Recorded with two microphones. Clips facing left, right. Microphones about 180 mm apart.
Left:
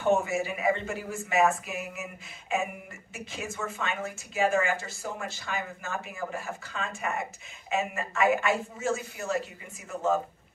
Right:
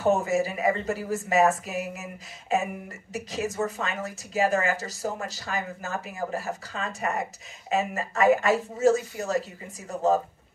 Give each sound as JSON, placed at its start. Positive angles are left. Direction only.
{"t": 0.0, "sound": "a woman's voice", "side_deg": -40}